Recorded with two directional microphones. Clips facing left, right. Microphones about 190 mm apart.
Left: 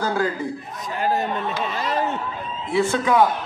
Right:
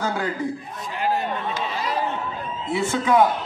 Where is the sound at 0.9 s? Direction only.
45° left (ahead or behind).